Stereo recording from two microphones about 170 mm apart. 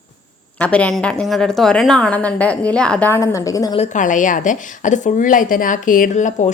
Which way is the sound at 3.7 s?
45° left (ahead or behind).